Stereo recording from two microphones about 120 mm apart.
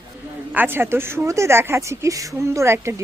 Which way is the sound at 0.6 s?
20° right (ahead or behind).